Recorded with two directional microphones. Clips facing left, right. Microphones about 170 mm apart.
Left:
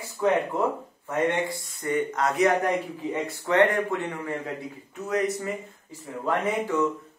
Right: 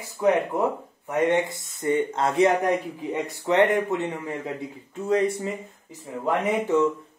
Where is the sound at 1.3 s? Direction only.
20° right (ahead or behind).